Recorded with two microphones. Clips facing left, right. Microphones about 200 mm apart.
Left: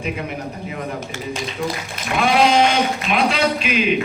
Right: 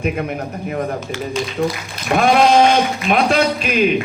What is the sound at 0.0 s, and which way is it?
A man's voice, 50° right (ahead or behind).